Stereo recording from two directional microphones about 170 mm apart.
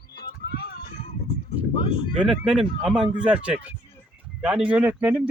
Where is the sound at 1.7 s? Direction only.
30° left (ahead or behind).